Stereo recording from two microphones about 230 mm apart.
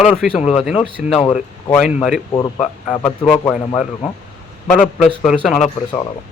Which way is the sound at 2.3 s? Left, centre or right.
Centre.